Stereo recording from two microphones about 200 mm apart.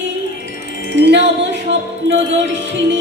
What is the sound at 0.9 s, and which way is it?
Wind chime, 65° right (ahead or behind).